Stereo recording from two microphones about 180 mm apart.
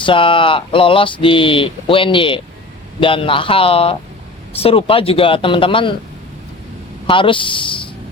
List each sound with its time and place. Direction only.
0.0 s speech: 30° left (ahead or behind)
7.1 s speech: 30° left (ahead or behind)